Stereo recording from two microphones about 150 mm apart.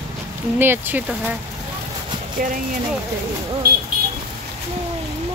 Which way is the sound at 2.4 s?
70° right (ahead or behind).